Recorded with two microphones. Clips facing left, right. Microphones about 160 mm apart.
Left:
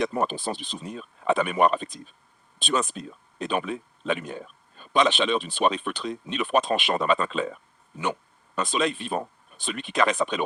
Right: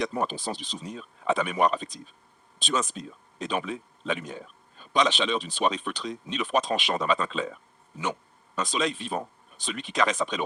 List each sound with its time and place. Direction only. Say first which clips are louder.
0.0 s speech: left 3 dB; 55° left (ahead or behind)
8.5 s speech: left 2 dB; 55° left (ahead or behind)